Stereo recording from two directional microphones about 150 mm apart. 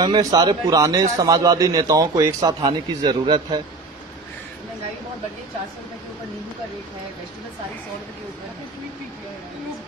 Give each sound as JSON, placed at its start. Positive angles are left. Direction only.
{"t": 0.0, "sound": "a man's voice", "side_deg": -25}